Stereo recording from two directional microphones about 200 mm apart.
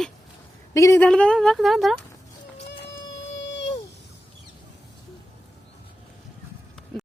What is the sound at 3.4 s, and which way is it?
Baby cry, 65° left (ahead or behind).